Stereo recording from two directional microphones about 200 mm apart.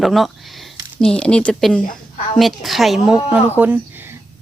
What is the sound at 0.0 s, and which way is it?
A woman's voice, centre (ahead or behind).